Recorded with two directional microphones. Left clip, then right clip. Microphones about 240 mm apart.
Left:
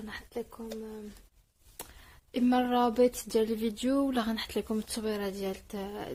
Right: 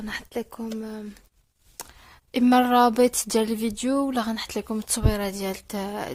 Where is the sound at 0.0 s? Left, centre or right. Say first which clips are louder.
Right 8 dB; right.